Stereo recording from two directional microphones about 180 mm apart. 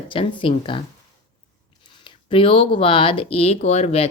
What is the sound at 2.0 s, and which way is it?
Speech, 30° left (ahead or behind).